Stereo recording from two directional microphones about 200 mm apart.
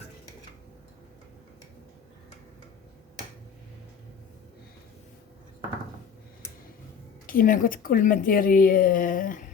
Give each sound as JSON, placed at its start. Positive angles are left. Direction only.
{"t": 7.3, "sound": "a woman's voice", "side_deg": 45}